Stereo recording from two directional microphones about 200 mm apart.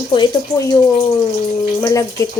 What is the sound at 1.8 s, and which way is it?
Speech, 15° left (ahead or behind).